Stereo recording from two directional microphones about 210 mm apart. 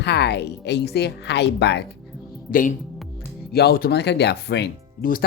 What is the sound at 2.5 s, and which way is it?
Speech, 40° left (ahead or behind).